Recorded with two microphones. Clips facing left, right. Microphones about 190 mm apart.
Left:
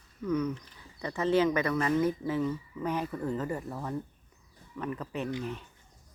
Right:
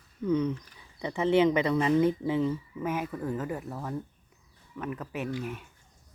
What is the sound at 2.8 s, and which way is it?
Speech, 5° right (ahead or behind).